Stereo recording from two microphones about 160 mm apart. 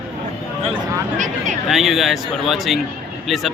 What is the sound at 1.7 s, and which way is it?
Speech, centre (ahead or behind).